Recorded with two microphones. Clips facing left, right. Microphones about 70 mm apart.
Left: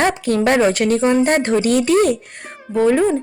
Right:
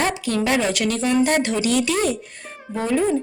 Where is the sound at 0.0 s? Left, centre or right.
Left.